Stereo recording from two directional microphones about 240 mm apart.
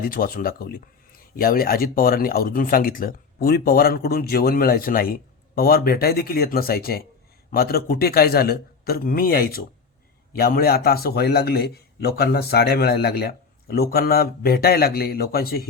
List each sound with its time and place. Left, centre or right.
0.0 s speech: left